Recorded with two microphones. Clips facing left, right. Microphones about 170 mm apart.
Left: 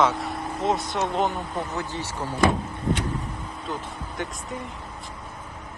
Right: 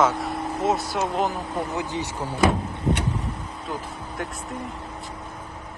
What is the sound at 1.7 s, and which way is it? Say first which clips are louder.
Speech: right 3 dB; 15° right (ahead or behind).